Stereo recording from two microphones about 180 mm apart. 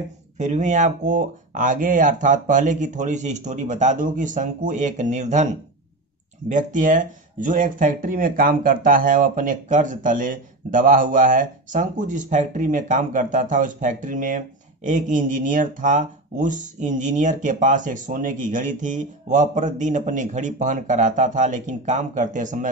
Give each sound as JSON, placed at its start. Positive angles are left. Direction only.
{"t": 0.4, "sound": "speech", "side_deg": -40}
{"t": 6.5, "sound": "speech", "side_deg": -45}